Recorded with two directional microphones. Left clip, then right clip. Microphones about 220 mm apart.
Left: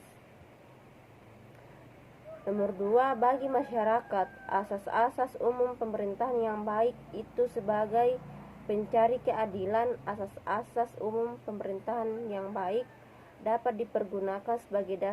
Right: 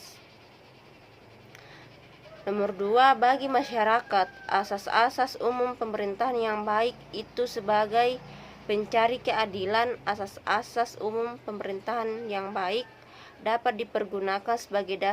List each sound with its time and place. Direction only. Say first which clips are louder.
2.4 s a woman's voice: right 3 dB; 25° right (ahead or behind)